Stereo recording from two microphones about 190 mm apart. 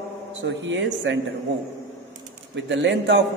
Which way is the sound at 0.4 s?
80° right.